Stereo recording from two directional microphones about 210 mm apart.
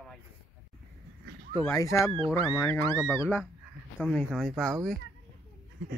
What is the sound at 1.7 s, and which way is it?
Speech, 15° left (ahead or behind).